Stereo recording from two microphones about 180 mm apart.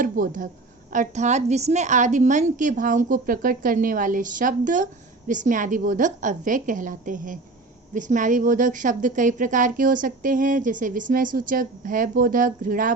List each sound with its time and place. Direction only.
0.0 s a woman's voice: 50° right (ahead or behind)